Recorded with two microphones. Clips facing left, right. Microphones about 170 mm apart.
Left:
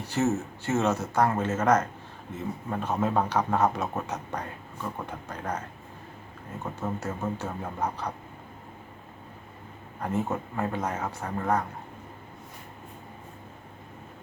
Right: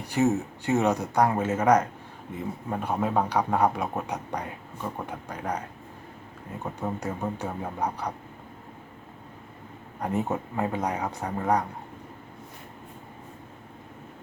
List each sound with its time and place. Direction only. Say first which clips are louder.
0.0 s a man's voice: right 2 dB; 15° right (ahead or behind)
10.0 s a man's voice: right 1 dB; 15° right (ahead or behind)